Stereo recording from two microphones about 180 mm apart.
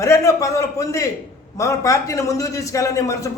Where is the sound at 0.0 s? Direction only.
15° left (ahead or behind).